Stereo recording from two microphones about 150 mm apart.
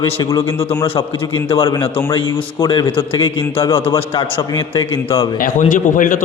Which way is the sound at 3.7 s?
20° left (ahead or behind).